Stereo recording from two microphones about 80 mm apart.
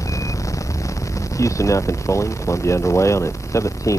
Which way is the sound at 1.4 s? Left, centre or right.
Left.